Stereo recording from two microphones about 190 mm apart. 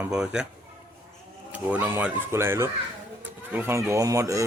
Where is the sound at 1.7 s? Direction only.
10° right (ahead or behind).